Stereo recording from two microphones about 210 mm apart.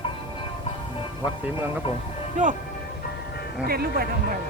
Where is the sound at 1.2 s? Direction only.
10° right (ahead or behind).